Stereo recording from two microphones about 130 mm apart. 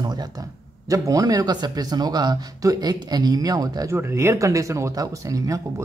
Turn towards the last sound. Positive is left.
turn(degrees=-25)  # may be behind; listen again after turning